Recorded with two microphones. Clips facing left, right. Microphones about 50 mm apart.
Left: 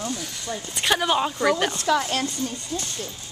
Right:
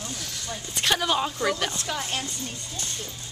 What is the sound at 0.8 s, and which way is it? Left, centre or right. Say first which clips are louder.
Speech: left 3 dB; centre.